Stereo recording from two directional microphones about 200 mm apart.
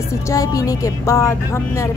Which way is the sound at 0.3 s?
15° left (ahead or behind).